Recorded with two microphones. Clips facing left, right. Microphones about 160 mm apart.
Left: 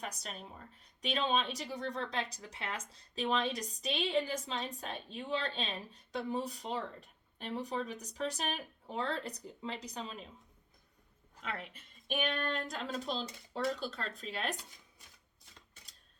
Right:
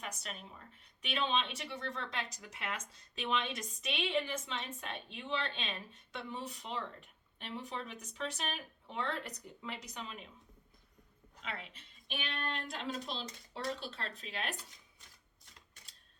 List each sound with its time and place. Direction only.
0.0 s speech: 35° left (ahead or behind)
11.4 s speech: 50° left (ahead or behind)